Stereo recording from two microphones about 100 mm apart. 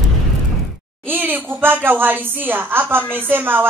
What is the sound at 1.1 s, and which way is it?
A woman's voice, 20° right (ahead or behind).